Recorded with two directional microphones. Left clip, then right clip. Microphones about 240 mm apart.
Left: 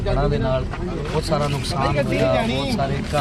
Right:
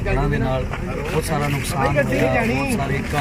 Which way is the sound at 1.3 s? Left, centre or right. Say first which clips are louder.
Left 1 dB; centre.